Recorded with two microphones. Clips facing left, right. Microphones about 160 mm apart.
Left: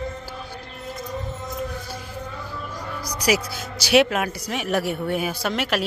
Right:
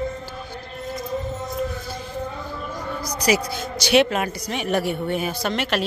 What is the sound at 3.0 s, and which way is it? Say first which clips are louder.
Speech: right 1 dB; 10° left (ahead or behind).